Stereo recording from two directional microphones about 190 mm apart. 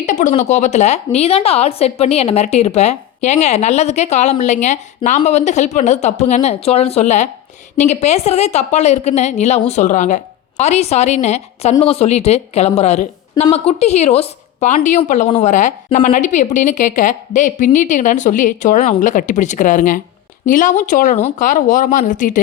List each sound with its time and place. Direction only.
0.0 s a woman's voice: 40° left (ahead or behind)